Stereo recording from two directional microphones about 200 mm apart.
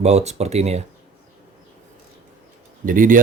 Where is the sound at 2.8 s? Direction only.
45° right (ahead or behind).